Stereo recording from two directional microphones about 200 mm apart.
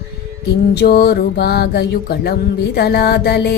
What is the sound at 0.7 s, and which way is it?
Music, 50° left (ahead or behind).